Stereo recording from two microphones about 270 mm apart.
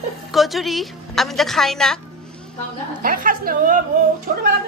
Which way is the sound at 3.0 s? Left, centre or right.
Right.